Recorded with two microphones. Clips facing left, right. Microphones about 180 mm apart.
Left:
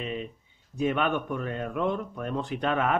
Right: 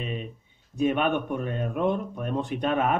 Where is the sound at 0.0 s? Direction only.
20° right (ahead or behind).